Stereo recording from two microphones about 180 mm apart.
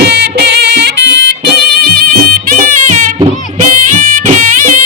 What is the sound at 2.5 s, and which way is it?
Music, 50° right (ahead or behind).